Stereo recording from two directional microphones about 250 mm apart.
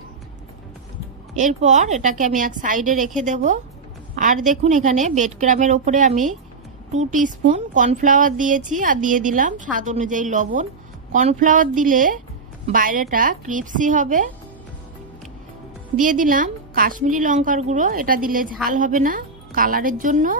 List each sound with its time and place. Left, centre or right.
1.4 s a woman's voice: right
16.0 s a woman's voice: right